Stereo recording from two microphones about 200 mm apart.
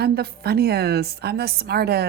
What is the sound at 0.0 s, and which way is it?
A woman's voice, 50° right (ahead or behind).